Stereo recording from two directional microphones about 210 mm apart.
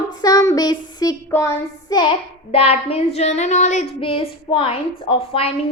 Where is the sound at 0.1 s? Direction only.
15° left (ahead or behind).